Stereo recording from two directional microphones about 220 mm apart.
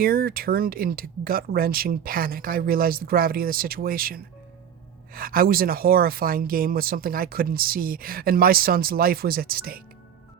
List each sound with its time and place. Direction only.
0.0 s speech: 40° right (ahead or behind)